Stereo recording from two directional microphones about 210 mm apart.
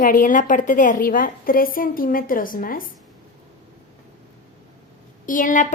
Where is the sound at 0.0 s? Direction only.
40° left (ahead or behind).